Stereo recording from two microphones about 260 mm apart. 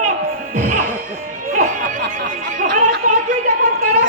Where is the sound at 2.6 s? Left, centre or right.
Right.